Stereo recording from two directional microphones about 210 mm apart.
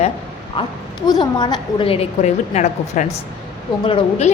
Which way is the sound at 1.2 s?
20° left (ahead or behind).